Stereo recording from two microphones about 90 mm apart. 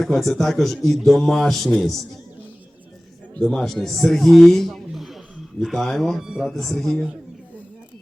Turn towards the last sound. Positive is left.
turn(degrees=5)  # may be behind; listen again after turning